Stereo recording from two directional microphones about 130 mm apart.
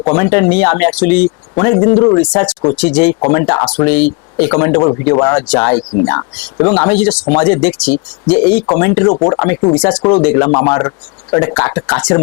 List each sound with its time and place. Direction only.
0.0 s speech: 25° left (ahead or behind)
9.1 s speech: 30° left (ahead or behind)
9.7 s speech: 10° left (ahead or behind)